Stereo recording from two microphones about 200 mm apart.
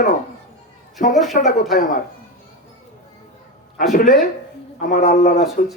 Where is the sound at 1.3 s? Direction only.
40° left (ahead or behind).